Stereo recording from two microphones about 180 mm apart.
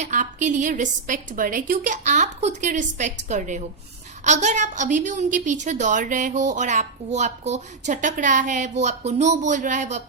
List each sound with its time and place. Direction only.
0.0 s a woman's voice: 45° right (ahead or behind)